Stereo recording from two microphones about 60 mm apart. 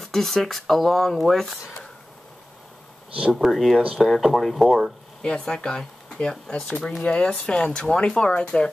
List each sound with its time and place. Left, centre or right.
0.0 s speech: centre
3.3 s speech: centre
5.2 s speech: centre